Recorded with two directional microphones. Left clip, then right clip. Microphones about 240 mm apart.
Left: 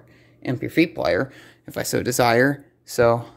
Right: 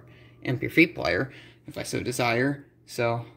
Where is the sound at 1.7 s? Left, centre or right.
Left.